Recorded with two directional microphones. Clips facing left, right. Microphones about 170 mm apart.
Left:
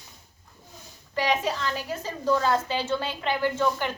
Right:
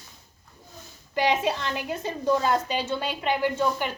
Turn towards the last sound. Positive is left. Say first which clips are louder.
# even
turn(degrees=-15)  # may be behind; listen again after turning